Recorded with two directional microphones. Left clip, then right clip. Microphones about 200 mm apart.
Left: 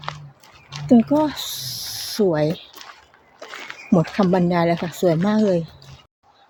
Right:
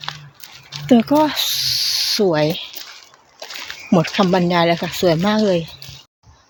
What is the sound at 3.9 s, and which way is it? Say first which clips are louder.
Speech: right 3 dB; centre (ahead or behind).